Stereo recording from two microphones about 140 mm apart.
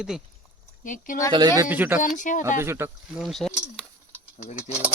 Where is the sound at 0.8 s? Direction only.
70° left (ahead or behind).